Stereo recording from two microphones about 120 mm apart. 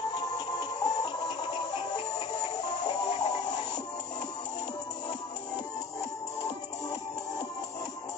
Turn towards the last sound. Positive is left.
turn(degrees=35)  # may be behind; listen again after turning